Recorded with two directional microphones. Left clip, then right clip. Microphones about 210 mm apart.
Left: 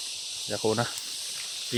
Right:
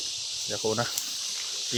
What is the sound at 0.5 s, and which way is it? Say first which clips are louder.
Speech: left 2 dB; 25° left (ahead or behind).